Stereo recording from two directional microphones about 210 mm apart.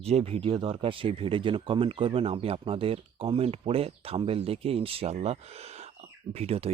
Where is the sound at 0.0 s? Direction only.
30° right (ahead or behind).